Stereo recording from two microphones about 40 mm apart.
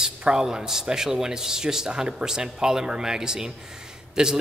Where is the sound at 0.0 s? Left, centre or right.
Centre.